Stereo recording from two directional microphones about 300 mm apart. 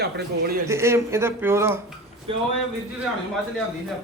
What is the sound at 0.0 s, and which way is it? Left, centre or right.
Speech, right.